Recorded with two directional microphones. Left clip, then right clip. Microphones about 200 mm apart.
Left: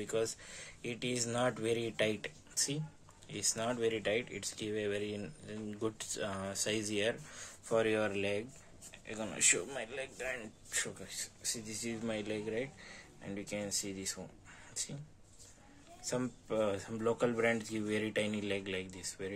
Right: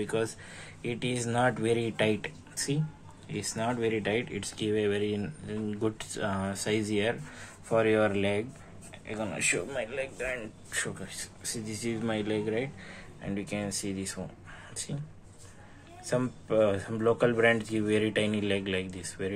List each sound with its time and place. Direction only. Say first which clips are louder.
0.0 s speech: right 5 dB; 10° left (ahead or behind)
11.1 s speech: right 2 dB; 90° left
11.7 s speech: right 9 dB; 5° left (ahead or behind)
16.1 s speech: right 8 dB; 10° left (ahead or behind)